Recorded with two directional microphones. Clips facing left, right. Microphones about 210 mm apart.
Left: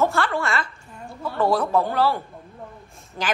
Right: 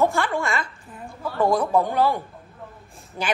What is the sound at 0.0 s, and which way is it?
A woman's voice, 15° right (ahead or behind).